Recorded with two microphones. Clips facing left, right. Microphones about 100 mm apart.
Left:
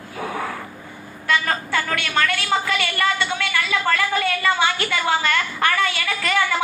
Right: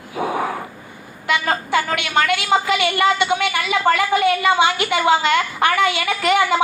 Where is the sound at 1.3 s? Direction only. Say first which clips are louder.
Right 3 dB; 20° right (ahead or behind).